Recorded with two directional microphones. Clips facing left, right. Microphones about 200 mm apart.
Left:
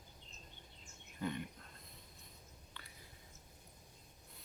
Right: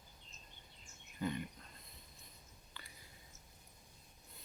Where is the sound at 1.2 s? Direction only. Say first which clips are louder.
Right 1 dB; centre (ahead or behind).